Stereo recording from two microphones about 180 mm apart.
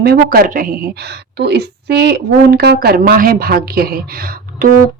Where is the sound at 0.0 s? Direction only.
60° right (ahead or behind).